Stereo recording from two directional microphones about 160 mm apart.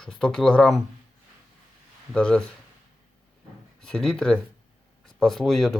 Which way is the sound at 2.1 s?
5° left (ahead or behind).